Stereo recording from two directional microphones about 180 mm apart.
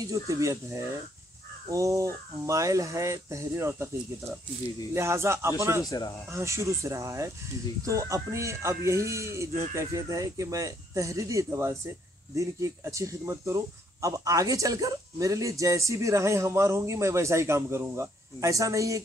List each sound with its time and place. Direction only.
0.0 s speech: 15° right (ahead or behind)
1.7 s speech: 15° right (ahead or behind)
5.9 s speech: 20° left (ahead or behind)
6.3 s speech: 15° right (ahead or behind)